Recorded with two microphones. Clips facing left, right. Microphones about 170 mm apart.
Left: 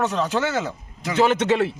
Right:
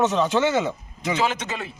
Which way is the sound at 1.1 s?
65° left (ahead or behind).